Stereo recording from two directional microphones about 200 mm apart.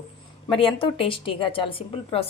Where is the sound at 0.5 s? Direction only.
25° left (ahead or behind).